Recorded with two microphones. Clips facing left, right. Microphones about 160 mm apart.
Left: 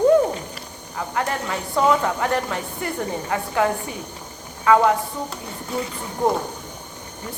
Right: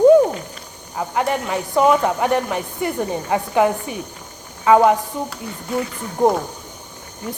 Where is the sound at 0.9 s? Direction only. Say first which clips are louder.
Right 4 dB; 20° right (ahead or behind).